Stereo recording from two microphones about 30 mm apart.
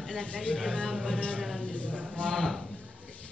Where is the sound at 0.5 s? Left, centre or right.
Left.